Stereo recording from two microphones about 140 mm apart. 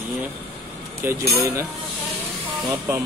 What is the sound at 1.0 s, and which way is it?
Speech, 20° right (ahead or behind).